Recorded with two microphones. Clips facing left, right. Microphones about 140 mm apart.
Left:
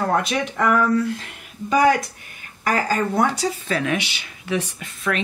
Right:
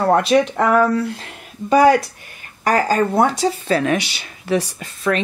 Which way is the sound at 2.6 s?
35° right (ahead or behind).